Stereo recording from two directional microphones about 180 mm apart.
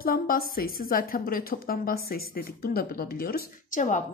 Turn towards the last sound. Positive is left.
turn(degrees=45)  # may be behind; listen again after turning